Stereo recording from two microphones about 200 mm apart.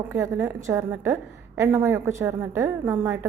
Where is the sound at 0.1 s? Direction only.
10° right (ahead or behind).